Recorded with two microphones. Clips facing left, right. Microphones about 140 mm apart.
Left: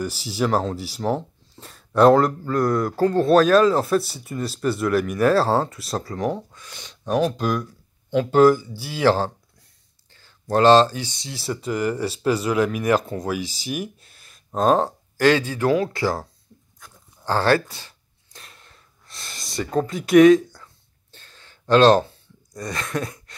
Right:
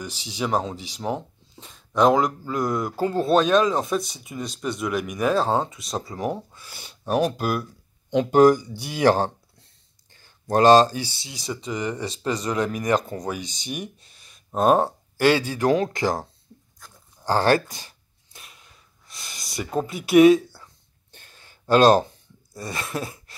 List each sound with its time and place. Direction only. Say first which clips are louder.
0.0 s speech: left 5 dB; 5° left (ahead or behind); by 9.2 s 15° right (ahead or behind)
10.5 s speech: even; 15° right (ahead or behind); by 14.3 s centre (ahead or behind)
14.5 s speech: even; 10° right (ahead or behind)
17.2 s a sound: even; 15° right (ahead or behind)
19.6 s speech: left 3 dB; 10° right (ahead or behind)
21.1 s a sound: left 1 dB; 15° right (ahead or behind)